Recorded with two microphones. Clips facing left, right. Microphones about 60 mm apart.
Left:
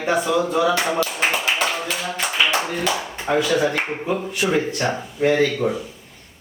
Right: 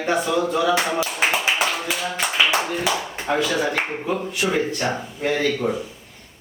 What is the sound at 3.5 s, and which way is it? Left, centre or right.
Speech, centre.